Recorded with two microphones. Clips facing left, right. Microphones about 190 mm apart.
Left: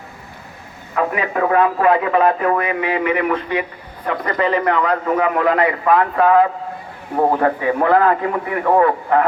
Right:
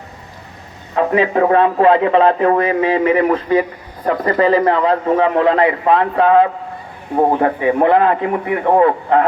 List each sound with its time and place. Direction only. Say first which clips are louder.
0.9 s a man's voice: right 5 dB; 30° right (ahead or behind)